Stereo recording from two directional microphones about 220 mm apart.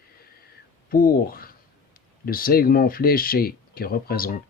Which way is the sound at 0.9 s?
40° left (ahead or behind).